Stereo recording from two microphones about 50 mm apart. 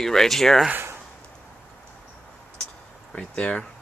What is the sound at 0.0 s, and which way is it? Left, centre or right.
Speech, centre.